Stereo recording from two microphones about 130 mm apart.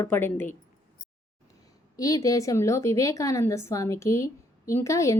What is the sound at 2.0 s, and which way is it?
A woman's voice, 25° left (ahead or behind).